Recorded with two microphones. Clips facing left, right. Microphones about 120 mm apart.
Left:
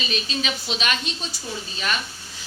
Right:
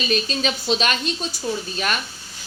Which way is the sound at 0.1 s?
40° right (ahead or behind).